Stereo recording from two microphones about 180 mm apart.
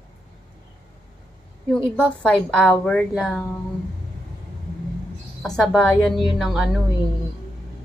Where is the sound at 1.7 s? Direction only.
5° left (ahead or behind).